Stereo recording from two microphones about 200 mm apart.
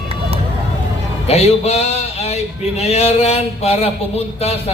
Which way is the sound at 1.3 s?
30° left (ahead or behind).